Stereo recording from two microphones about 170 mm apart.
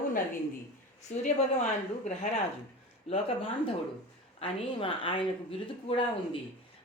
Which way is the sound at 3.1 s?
35° left (ahead or behind).